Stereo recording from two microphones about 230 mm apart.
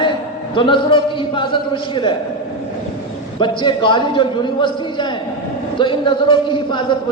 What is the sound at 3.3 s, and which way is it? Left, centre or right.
A man's voice, left.